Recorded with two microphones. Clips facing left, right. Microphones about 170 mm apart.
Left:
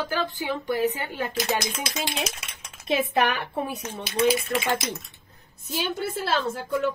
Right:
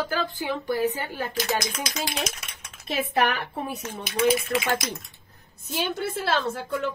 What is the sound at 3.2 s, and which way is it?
Speech, 15° left (ahead or behind).